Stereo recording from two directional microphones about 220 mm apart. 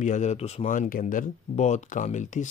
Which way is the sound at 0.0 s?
35° left (ahead or behind).